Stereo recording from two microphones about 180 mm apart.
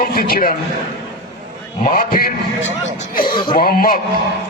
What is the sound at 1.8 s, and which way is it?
A man's voice, 50° left (ahead or behind).